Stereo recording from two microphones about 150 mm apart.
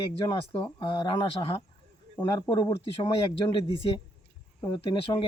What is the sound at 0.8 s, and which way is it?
Speech, 30° left (ahead or behind).